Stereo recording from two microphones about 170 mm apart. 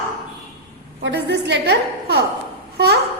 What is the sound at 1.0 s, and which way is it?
A woman's voice, 90° right.